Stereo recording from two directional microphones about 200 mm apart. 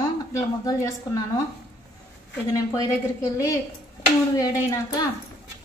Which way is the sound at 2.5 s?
15° left (ahead or behind).